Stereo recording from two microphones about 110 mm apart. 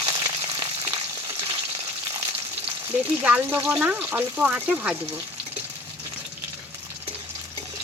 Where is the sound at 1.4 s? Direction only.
50° right (ahead or behind).